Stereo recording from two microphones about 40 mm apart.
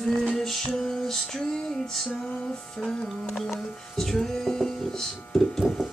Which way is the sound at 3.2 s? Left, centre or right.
Centre.